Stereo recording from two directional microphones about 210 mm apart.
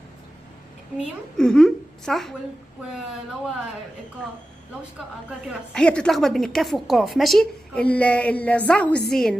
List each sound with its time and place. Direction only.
0.9 s a woman's voice: centre (ahead or behind)
5.7 s a woman's voice: 5° left (ahead or behind)